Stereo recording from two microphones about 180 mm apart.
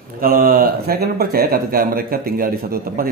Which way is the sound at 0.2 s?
55° right (ahead or behind).